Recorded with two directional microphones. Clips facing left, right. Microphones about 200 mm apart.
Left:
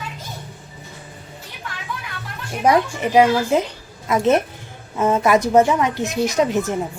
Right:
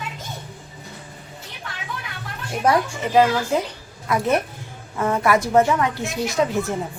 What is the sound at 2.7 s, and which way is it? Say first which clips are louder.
A woman's voice: left 3 dB; 15° left (ahead or behind).